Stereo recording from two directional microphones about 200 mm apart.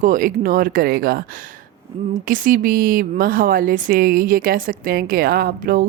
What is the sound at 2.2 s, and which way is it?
Speech, 45° right (ahead or behind).